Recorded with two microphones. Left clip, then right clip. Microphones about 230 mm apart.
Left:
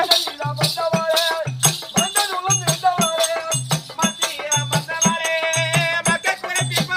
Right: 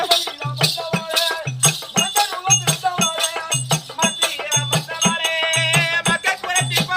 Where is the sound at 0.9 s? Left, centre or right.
Centre.